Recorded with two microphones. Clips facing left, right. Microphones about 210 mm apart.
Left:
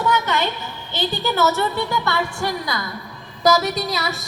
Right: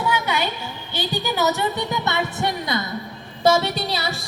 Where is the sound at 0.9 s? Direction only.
15° right (ahead or behind).